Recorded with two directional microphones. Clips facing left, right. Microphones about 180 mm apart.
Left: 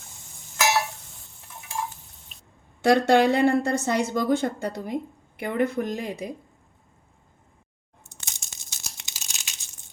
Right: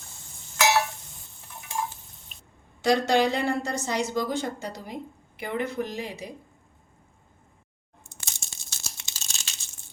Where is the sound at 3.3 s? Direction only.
60° left (ahead or behind).